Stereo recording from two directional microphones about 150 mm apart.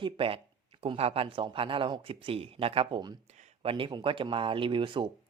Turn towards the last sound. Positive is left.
turn(degrees=-35)  # may be behind; listen again after turning